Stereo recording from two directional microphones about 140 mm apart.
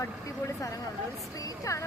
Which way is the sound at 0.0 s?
20° left (ahead or behind).